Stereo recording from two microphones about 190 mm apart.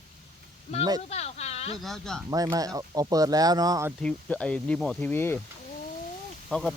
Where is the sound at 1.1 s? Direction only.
35° left (ahead or behind).